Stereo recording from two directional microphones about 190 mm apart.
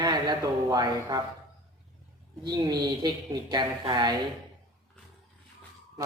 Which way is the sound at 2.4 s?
20° right (ahead or behind).